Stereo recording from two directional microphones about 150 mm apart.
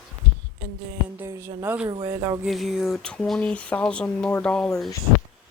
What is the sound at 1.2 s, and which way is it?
Speech, 15° right (ahead or behind).